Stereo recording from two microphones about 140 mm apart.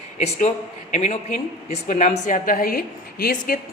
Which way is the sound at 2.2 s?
70° left (ahead or behind).